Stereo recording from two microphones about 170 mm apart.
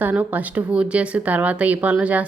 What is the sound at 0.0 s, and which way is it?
A woman's voice, 10° right (ahead or behind).